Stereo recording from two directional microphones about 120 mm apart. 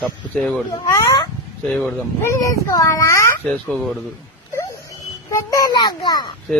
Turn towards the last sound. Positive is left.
turn(degrees=35)  # may be behind; listen again after turning